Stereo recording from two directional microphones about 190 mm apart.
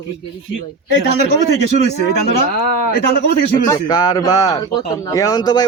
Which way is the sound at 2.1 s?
55° left (ahead or behind).